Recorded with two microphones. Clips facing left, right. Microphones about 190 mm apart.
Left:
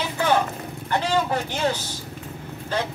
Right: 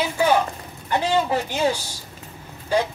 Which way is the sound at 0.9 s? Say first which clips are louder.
Right 2 dB; 10° right (ahead or behind).